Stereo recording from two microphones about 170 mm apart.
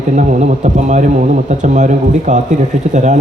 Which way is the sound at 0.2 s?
45° right (ahead or behind).